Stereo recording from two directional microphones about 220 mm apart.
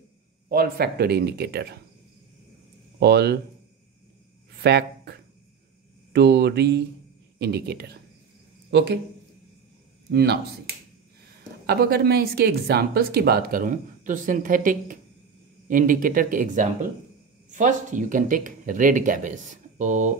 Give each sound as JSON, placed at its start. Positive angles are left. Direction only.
{"t": 0.5, "sound": "speech", "side_deg": -45}
{"t": 3.0, "sound": "speech", "side_deg": -50}
{"t": 4.6, "sound": "speech", "side_deg": -50}
{"t": 6.1, "sound": "speech", "side_deg": -50}
{"t": 10.1, "sound": "speech", "side_deg": -50}
{"t": 11.6, "sound": "speech", "side_deg": -45}